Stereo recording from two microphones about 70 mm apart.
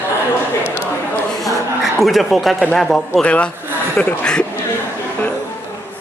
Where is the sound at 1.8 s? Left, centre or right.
Centre.